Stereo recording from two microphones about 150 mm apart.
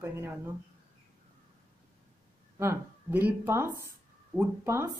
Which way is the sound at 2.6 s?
15° right (ahead or behind).